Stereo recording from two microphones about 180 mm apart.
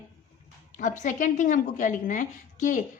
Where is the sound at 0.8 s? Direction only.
45° left (ahead or behind).